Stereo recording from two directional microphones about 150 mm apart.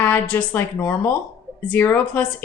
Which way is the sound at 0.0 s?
10° left (ahead or behind).